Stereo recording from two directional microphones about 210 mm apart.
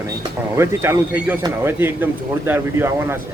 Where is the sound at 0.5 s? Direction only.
10° right (ahead or behind).